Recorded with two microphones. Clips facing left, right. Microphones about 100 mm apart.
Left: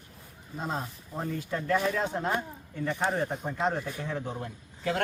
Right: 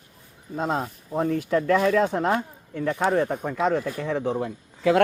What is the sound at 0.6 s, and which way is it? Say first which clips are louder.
Speech: right 8 dB; 75° right (ahead or behind).